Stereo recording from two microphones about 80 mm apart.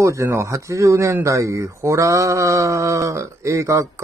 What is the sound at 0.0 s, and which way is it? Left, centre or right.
Speech, right.